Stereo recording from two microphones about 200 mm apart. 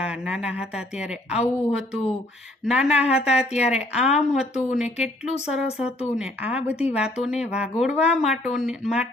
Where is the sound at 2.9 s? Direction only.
30° left (ahead or behind).